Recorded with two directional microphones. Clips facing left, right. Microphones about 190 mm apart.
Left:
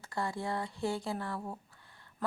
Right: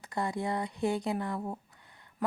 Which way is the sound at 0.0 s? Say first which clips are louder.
Right 3 dB; 20° right (ahead or behind).